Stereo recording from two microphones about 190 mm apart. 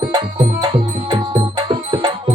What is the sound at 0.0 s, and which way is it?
Music, 20° right (ahead or behind).